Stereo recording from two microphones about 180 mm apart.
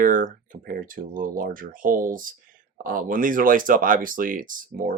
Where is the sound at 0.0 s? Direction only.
50° right (ahead or behind).